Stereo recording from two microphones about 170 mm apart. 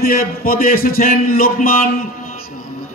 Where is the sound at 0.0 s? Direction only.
60° left (ahead or behind).